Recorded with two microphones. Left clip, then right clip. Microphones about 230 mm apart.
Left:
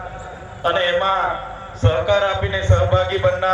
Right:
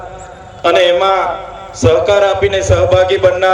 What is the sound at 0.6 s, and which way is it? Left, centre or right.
A man's voice, right.